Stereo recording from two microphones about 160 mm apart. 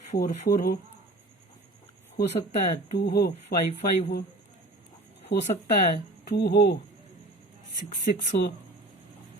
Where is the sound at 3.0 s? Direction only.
85° left.